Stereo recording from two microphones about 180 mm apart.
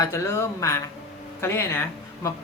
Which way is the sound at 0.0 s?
15° left (ahead or behind).